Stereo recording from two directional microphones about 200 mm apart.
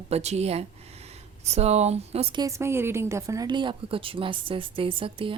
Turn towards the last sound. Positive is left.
turn(degrees=-25)  # may be behind; listen again after turning